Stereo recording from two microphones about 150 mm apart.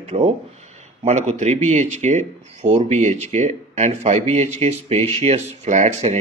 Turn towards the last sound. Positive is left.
turn(degrees=-50)  # may be behind; listen again after turning